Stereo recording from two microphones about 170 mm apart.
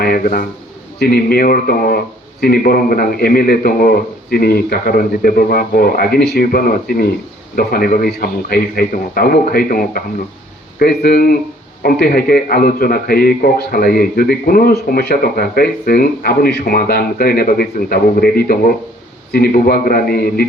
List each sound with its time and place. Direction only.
0.0 s a man's voice: 55° left (ahead or behind)
10.8 s a man's voice: 70° left (ahead or behind)